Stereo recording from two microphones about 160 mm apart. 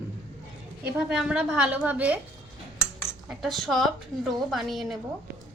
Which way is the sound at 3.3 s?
Centre (ahead or behind).